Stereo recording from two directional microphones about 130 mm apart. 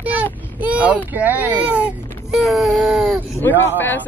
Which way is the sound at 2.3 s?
Centre (ahead or behind).